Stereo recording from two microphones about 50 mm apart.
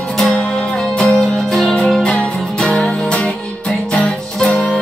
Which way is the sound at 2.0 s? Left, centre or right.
Centre.